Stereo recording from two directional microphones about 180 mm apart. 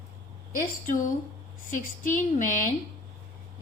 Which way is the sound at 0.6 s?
50° left (ahead or behind).